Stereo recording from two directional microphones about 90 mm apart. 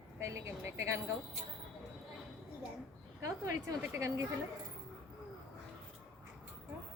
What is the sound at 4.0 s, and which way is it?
Speech, 30° right (ahead or behind).